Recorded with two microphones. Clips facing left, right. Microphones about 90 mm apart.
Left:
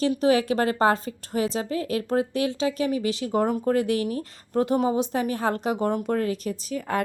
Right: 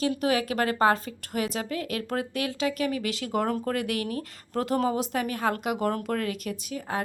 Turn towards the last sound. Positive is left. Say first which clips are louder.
# left 4 dB
turn(degrees=55)  # may be behind; listen again after turning